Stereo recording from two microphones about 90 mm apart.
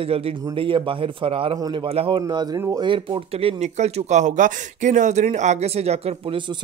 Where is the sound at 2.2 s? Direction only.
50° right (ahead or behind).